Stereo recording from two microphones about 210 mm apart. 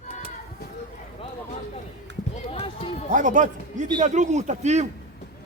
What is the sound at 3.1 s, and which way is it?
A man's voice, 35° right (ahead or behind).